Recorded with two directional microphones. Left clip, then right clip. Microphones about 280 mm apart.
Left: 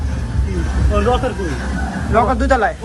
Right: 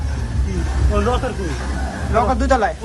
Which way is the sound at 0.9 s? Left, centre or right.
Centre.